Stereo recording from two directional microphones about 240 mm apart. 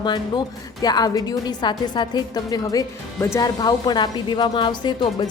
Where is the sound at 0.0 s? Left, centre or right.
Centre.